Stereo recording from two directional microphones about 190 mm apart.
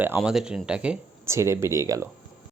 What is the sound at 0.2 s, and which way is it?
Speech, 5° right (ahead or behind).